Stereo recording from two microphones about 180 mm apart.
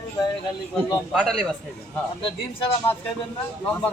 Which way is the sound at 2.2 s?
30° left (ahead or behind).